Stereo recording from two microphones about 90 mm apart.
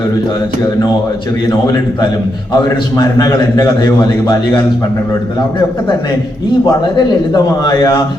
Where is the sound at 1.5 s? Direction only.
45° left (ahead or behind).